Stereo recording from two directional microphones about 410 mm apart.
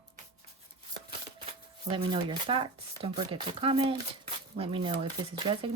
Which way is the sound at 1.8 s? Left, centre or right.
Centre.